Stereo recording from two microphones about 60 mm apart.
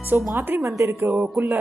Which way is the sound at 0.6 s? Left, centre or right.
Right.